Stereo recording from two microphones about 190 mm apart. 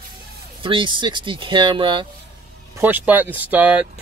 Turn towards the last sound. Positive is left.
turn(degrees=-5)  # may be behind; listen again after turning